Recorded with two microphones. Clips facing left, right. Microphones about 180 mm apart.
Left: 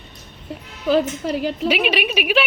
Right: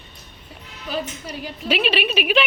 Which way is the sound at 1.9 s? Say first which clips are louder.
Left 1 dB; 10° left (ahead or behind).